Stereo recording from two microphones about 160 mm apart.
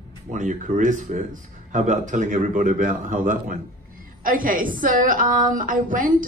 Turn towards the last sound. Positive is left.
turn(degrees=-55)  # may be behind; listen again after turning